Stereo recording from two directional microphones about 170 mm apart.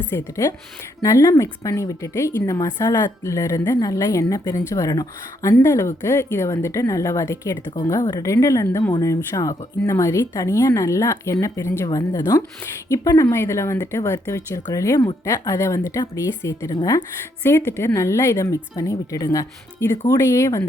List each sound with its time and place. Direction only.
0.1 s a woman's voice: 20° left (ahead or behind)